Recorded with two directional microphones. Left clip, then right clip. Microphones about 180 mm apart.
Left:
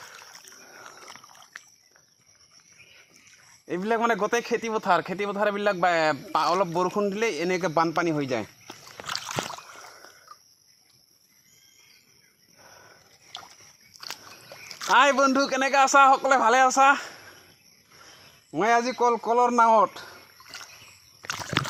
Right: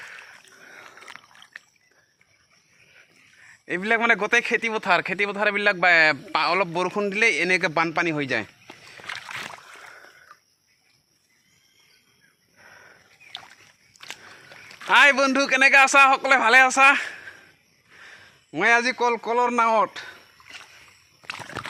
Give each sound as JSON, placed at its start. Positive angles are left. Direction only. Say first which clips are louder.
{"t": 3.7, "sound": "speech", "louder": "right 4 dB", "side_deg": -25}
{"t": 9.0, "sound": "rowboat", "louder": "left 2 dB", "side_deg": -5}
{"t": 14.8, "sound": "a sound", "louder": "right 3 dB", "side_deg": -20}
{"t": 15.2, "sound": "speech", "louder": "right 4 dB", "side_deg": -20}
{"t": 18.5, "sound": "a man's voice", "louder": "right 3 dB", "side_deg": -15}
{"t": 19.5, "sound": "speech", "louder": "left 2 dB", "side_deg": -30}